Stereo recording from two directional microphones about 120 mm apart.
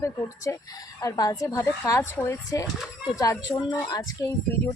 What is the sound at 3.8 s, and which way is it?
Speech, 35° left (ahead or behind).